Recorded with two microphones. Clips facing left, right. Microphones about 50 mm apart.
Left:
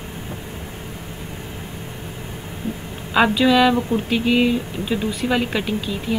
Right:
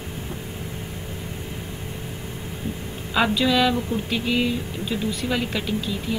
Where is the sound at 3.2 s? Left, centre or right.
Centre.